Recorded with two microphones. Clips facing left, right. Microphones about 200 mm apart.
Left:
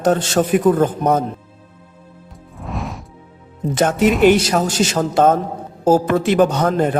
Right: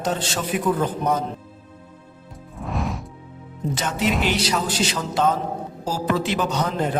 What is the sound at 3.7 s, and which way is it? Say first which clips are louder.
A man's voice: left 10 dB; 50° left (ahead or behind).